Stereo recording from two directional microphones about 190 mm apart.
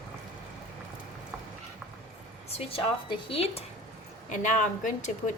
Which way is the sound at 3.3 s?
30° left (ahead or behind).